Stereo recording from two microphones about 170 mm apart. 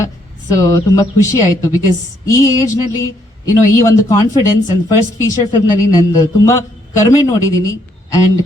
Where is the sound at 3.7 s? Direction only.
20° left (ahead or behind).